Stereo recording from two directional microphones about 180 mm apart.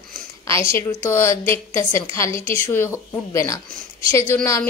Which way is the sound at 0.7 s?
15° left (ahead or behind).